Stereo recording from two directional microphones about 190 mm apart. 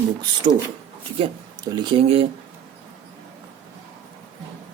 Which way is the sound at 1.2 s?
20° right (ahead or behind).